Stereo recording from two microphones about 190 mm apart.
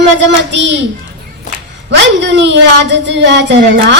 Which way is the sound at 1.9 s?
65° right (ahead or behind).